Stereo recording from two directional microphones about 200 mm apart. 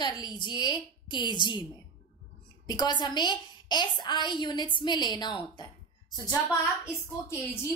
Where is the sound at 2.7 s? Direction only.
20° left (ahead or behind).